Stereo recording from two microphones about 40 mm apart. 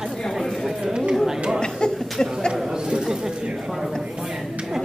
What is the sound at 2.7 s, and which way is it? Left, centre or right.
Chatter, centre.